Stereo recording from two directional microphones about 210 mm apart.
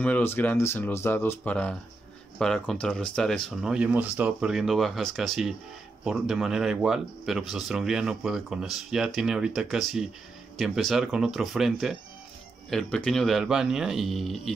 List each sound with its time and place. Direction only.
0.0 s speech: 10° left (ahead or behind)